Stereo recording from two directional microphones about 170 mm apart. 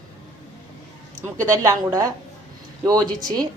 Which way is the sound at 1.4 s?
20° right (ahead or behind).